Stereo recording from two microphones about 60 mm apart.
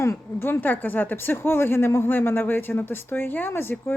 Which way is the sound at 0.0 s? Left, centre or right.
Left.